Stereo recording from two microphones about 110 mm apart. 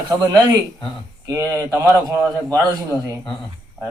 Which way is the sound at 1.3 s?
30° right (ahead or behind).